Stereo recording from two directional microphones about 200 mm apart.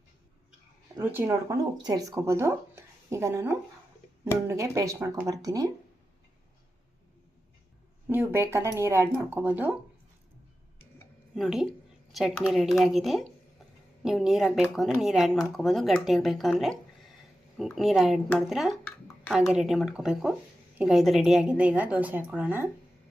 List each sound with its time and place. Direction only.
0.9 s speech: 10° right (ahead or behind)
8.0 s speech: 10° right (ahead or behind)
11.3 s speech: centre (ahead or behind)